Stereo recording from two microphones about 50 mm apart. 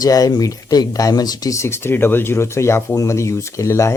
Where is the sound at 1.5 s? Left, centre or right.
Left.